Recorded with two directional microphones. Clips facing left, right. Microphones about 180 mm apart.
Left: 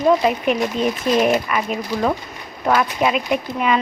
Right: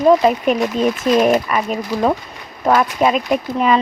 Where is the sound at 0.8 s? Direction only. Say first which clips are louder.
Right 4 dB; 40° right (ahead or behind).